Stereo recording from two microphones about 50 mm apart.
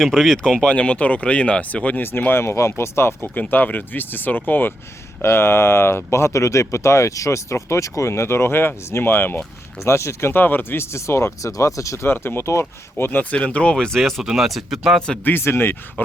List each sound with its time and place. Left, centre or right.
0.0 s speech: centre
0.5 s speech: centre
2.0 s speech: left
3.5 s speech: left
5.2 s speech: left
9.8 s speech: left
10.3 s speech: left
10.9 s speech: left
12.0 s speech: left
12.5 s speech: left
13.3 s speech: left
14.3 s speech: centre
15.2 s speech: left